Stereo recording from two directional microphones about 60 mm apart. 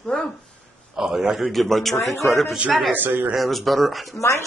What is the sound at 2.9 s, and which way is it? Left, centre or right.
Speech, right.